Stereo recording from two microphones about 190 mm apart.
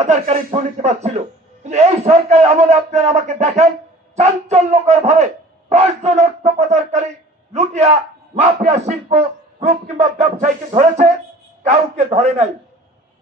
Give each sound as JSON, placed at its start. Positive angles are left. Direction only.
{"t": 0.0, "sound": "speech", "side_deg": -35}